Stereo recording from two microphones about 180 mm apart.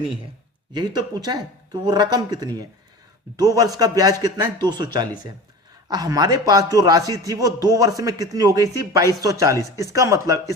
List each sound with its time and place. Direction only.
0.7 s a man's voice: 25° right (ahead or behind)